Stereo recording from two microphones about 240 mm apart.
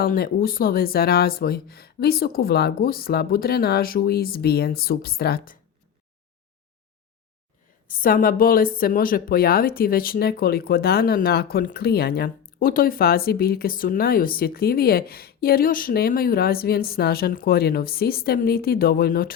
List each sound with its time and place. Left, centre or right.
0.0 s a woman's voice: left
7.9 s a woman's voice: left